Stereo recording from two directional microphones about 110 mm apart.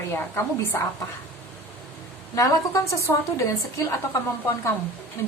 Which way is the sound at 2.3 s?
30° left (ahead or behind).